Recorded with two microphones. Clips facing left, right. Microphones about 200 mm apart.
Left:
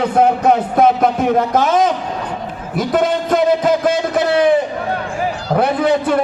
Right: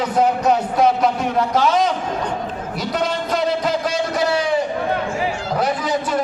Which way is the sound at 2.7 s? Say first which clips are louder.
Left 7 dB; 50° left (ahead or behind).